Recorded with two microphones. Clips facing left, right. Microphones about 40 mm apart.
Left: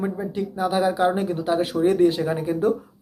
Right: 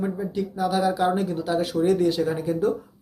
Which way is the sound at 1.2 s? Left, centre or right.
Left.